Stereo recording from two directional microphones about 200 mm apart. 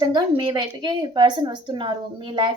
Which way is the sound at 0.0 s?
20° right (ahead or behind).